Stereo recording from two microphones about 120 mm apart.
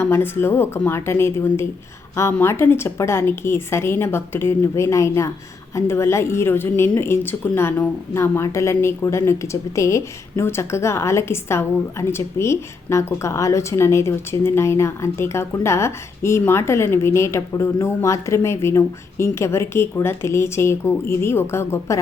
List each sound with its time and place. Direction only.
0.0 s speech: 20° left (ahead or behind)